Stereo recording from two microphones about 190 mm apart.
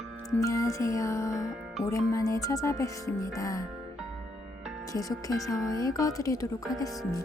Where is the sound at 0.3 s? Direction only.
15° left (ahead or behind).